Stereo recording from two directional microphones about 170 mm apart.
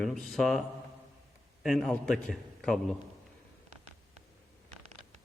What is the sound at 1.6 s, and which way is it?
Speech, centre (ahead or behind).